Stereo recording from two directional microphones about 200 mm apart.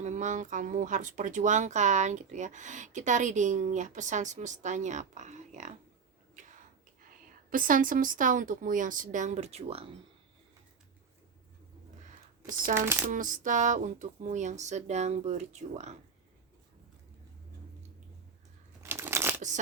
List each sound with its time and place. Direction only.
0.0 s speech: 35° right (ahead or behind)
7.5 s speech: 40° right (ahead or behind)
12.7 s speech: 10° right (ahead or behind)
13.1 s speech: 40° right (ahead or behind)
18.8 s a sound: 10° right (ahead or behind)